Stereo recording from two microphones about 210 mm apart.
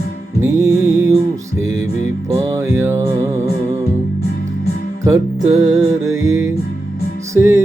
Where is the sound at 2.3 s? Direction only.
15° right (ahead or behind).